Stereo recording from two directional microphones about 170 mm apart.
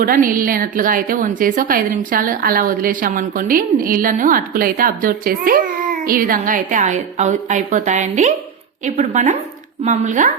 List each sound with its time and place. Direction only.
0.0 s a woman's voice: 55° right (ahead or behind)